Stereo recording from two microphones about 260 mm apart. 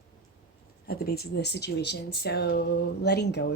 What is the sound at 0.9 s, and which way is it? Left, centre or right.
A woman's voice, left.